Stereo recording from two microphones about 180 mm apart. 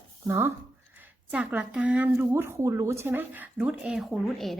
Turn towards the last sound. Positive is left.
turn(degrees=0)  # may be behind; listen again after turning